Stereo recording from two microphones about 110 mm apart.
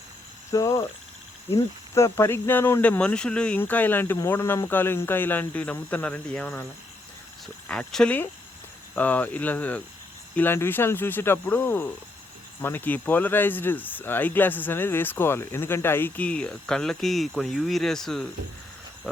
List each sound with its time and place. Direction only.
0.5 s speech: 30° left (ahead or behind)
2.0 s speech: 25° left (ahead or behind)
3.0 s speech: 10° left (ahead or behind)